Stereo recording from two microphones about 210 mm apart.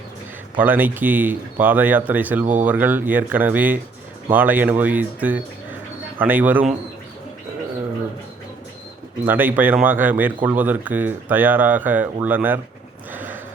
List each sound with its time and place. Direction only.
0.5 s speech: 10° right (ahead or behind)
9.2 s speech: 10° right (ahead or behind)
13.1 s a sound: 10° right (ahead or behind)